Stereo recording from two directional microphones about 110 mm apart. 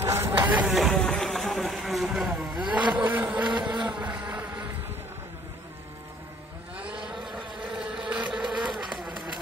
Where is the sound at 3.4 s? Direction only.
45° right (ahead or behind).